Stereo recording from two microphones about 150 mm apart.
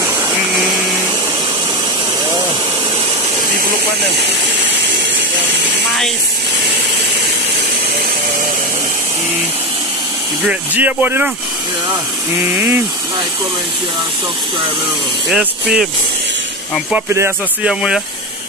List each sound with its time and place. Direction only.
10.5 s speech: 10° right (ahead or behind)
15.2 s speech: 5° right (ahead or behind)
16.9 s speech: 15° right (ahead or behind)
17.6 s speech: 5° right (ahead or behind)